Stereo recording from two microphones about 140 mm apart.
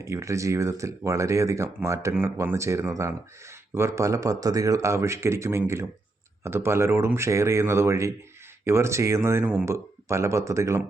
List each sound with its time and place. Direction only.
0.0 s speech: 20° right (ahead or behind)